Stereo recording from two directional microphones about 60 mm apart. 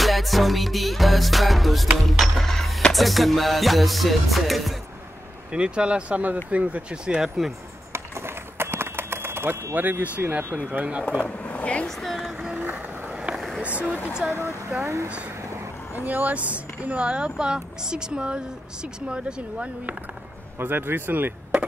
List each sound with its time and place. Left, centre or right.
0.0 s music: centre
5.5 s speech: centre
8.5 s typewriter: right
10.7 s speech: right
11.2 s speech: left
12.0 s vehicle: centre
12.5 s vehicle: right
13.6 s speech: right
14.8 s speech: right
16.1 s speech: right
20.5 s speech: right